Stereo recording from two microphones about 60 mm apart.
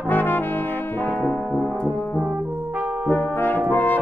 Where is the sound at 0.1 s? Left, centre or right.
Left.